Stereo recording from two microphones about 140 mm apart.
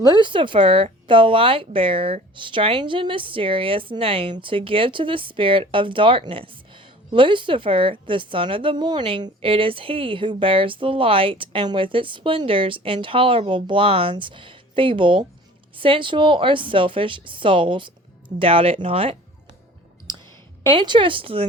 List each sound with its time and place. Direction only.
0.0 s a woman's voice: 30° right (ahead or behind)
20.7 s a woman's voice: 35° right (ahead or behind)